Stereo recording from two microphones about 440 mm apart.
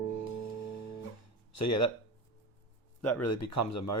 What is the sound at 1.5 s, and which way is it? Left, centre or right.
Speech, left.